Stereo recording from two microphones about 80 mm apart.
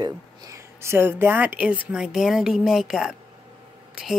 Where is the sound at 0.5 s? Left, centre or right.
Right.